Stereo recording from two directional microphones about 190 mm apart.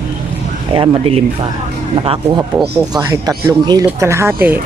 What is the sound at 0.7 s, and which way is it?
Speech, 30° right (ahead or behind).